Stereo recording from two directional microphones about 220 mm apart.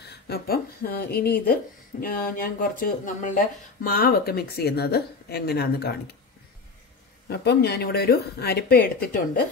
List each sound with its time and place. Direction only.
0.0 s speech: 45° left (ahead or behind)
7.2 s speech: 50° left (ahead or behind)